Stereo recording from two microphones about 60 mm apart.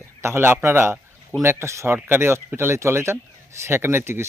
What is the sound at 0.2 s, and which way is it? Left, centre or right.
Speech, right.